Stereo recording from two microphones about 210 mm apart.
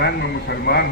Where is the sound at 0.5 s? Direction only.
50° left (ahead or behind).